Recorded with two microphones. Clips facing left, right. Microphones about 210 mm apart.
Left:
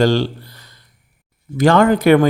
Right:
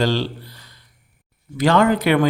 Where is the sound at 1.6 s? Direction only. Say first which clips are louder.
Left 4 dB; 45° left (ahead or behind).